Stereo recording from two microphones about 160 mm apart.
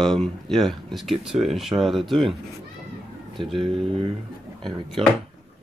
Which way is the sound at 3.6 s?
35° right (ahead or behind).